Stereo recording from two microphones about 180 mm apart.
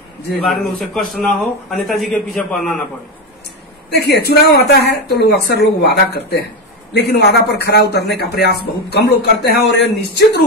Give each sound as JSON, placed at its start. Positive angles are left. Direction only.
{"t": 0.5, "sound": "a man's voice", "side_deg": 0}
{"t": 3.9, "sound": "a man's voice", "side_deg": 65}